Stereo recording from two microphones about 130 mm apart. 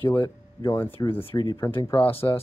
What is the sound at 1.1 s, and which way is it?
Speech, 45° left (ahead or behind).